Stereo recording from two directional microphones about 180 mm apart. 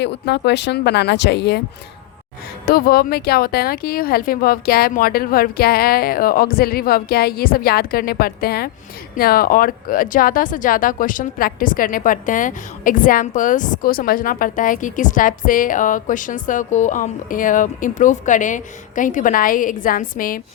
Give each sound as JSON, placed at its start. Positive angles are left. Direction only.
{"t": 0.0, "sound": "speech", "side_deg": 70}
{"t": 2.6, "sound": "speech", "side_deg": 55}